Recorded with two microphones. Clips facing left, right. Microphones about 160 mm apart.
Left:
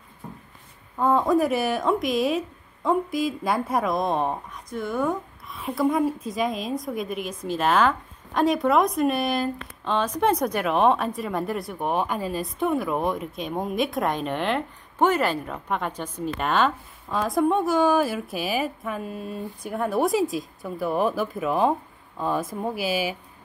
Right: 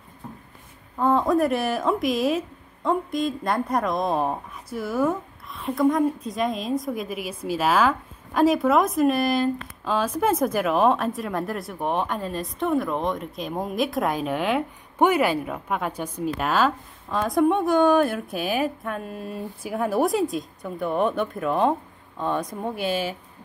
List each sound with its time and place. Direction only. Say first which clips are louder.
0.9 s a woman's voice: even; centre (ahead or behind)